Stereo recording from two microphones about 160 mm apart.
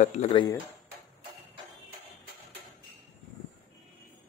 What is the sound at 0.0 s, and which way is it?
Speech, 45° left (ahead or behind).